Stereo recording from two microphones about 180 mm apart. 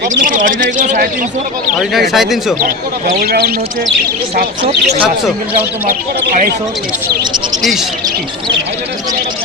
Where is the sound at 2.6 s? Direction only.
50° right (ahead or behind).